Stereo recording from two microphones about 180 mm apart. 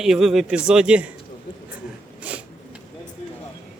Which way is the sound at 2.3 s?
10° right (ahead or behind).